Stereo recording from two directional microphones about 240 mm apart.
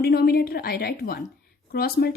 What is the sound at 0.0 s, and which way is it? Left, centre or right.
A woman's voice, left.